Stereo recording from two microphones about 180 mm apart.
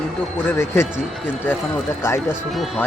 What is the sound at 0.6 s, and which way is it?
Speech, 15° left (ahead or behind).